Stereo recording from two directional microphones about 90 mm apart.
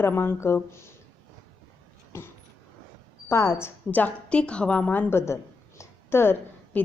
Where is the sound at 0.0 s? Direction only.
25° left (ahead or behind).